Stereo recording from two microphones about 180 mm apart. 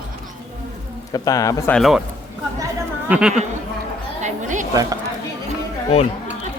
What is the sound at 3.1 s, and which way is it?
Speech, 5° right (ahead or behind).